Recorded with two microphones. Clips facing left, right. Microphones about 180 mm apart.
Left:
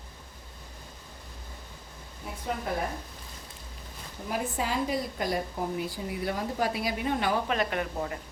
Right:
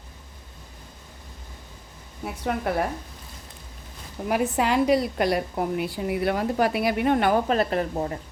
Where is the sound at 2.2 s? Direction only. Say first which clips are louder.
Right 7 dB; 70° right (ahead or behind).